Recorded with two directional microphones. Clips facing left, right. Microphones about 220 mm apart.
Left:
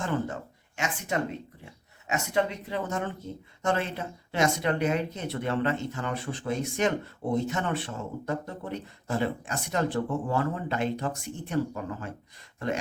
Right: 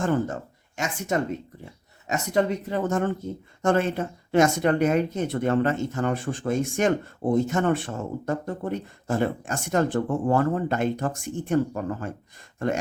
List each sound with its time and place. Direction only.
0.0 s speech: 45° right (ahead or behind)